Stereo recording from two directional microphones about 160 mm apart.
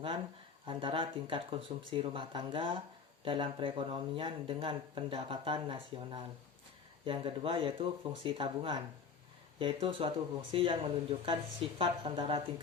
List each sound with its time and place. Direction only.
0.6 s speech: 30° right (ahead or behind)